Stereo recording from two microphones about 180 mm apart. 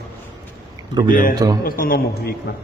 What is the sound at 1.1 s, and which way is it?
Speech, 50° left (ahead or behind).